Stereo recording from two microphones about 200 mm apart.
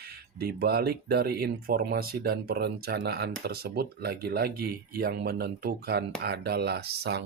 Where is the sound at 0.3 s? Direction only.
50° right (ahead or behind).